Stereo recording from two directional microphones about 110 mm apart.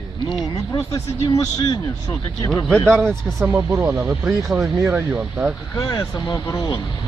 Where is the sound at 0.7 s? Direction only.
40° left (ahead or behind).